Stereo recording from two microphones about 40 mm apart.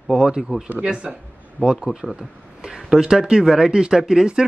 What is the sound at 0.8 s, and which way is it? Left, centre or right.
Speech, right.